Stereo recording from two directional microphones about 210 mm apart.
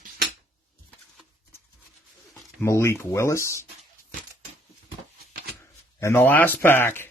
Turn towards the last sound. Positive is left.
turn(degrees=10)  # may be behind; listen again after turning